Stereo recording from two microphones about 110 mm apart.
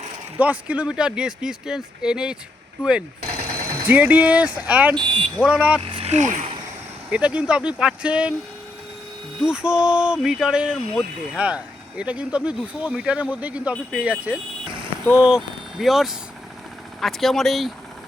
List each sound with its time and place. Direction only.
0.3 s speech: 15° right (ahead or behind)
3.8 s speech: 15° right (ahead or behind)
4.9 s speech: 50° right (ahead or behind)
5.5 s speech: 10° right (ahead or behind)
5.9 s speech: 75° right (ahead or behind)
7.1 s speech: 10° right (ahead or behind)
9.4 s speech: 10° right (ahead or behind)